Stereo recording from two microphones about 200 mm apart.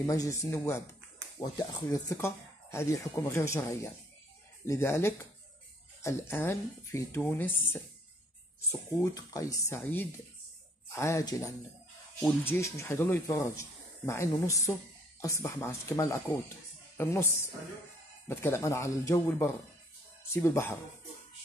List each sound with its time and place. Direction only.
0.0 s speech: 15° left (ahead or behind)